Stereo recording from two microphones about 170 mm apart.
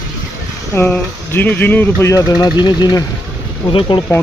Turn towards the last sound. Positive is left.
turn(degrees=30)  # may be behind; listen again after turning